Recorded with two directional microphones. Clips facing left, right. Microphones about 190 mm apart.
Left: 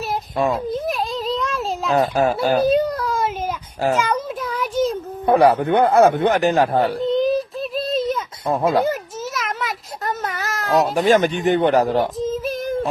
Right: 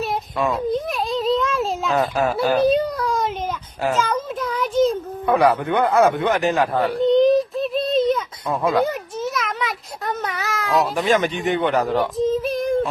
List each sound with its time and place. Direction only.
0.5 s a sound: centre (ahead or behind)
2.0 s a man's voice: 35° left (ahead or behind)
2.6 s a sound: centre (ahead or behind)
5.2 s a man's voice: 30° left (ahead or behind)
7.0 s child singing: centre (ahead or behind)
8.4 s a man's voice: 40° left (ahead or behind)
8.8 s a sound: centre (ahead or behind)
10.9 s a man's voice: 40° left (ahead or behind)
12.1 s child singing: centre (ahead or behind)